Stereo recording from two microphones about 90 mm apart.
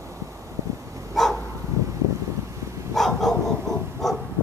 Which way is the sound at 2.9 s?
5° left (ahead or behind).